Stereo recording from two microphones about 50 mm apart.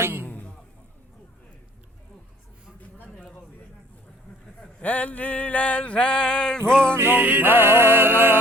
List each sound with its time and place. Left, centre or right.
0.0 s music: right
0.3 s music: left
4.8 s a sound: left
6.7 s music: centre
6.9 s music: right